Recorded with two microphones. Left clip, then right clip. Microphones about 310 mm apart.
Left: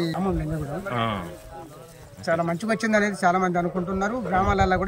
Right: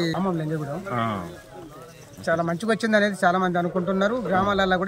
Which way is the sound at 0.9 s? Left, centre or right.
Centre.